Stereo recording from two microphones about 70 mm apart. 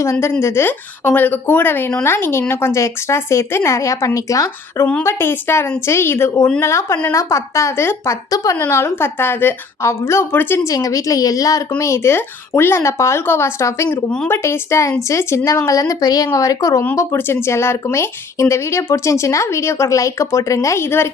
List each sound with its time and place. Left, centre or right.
0.0 s a woman's voice: left
5.0 s a woman's voice: left
8.7 s a woman's voice: left
10.7 s a woman's voice: left
11.8 s a woman's voice: left
16.9 s a woman's voice: left